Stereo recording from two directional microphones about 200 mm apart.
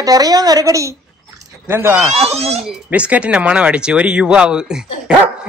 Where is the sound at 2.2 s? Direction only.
30° right (ahead or behind).